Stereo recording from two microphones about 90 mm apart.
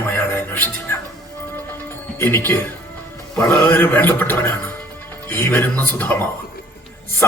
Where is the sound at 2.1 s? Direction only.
25° left (ahead or behind).